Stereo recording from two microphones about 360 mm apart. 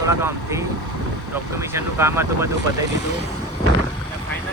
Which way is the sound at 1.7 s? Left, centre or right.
Centre.